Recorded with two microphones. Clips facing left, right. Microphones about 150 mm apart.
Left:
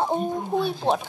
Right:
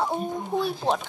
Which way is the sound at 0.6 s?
Centre (ahead or behind).